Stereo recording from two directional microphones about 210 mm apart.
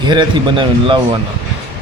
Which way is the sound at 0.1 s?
20° right (ahead or behind).